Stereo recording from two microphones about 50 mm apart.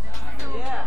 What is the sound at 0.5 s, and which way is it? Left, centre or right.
Music, centre.